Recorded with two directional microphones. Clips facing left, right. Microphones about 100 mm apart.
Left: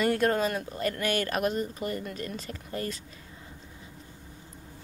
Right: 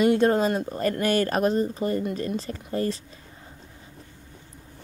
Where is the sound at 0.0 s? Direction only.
20° right (ahead or behind).